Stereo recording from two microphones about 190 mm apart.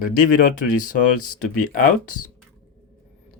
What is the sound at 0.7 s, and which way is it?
Speech, 45° left (ahead or behind).